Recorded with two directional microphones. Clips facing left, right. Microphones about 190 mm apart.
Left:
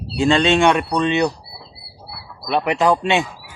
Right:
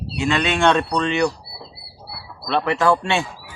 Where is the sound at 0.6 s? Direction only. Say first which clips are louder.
Left 2 dB; 15° left (ahead or behind).